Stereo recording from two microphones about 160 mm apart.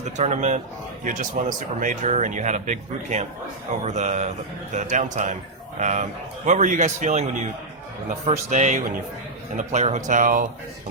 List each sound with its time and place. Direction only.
0.0 s speech: 45° right (ahead or behind)